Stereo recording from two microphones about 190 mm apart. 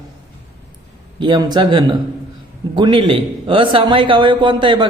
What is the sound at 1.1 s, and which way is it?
Speech, 25° right (ahead or behind).